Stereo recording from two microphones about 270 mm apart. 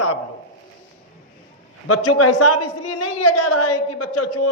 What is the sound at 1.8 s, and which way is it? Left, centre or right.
A man's voice, left.